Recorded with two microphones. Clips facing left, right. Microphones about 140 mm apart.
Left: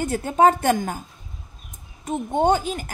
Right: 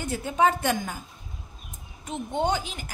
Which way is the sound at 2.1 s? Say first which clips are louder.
Left 7 dB; 45° left (ahead or behind).